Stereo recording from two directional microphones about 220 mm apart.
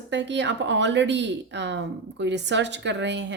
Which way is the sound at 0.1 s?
55° right (ahead or behind).